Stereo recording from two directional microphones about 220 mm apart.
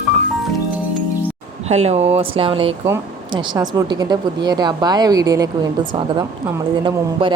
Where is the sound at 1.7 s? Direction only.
30° right (ahead or behind).